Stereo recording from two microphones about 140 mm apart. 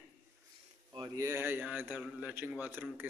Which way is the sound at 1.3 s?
15° right (ahead or behind).